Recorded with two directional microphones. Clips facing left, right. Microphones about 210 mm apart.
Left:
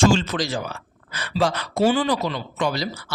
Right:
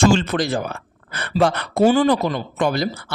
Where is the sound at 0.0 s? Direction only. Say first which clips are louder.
Right 2 dB; 60° right (ahead or behind).